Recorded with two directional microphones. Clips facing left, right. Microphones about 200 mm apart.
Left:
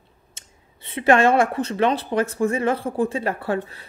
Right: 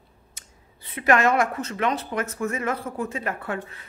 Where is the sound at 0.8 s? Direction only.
25° left (ahead or behind).